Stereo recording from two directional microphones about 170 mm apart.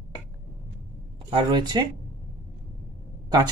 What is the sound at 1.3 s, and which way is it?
Speech, 25° right (ahead or behind).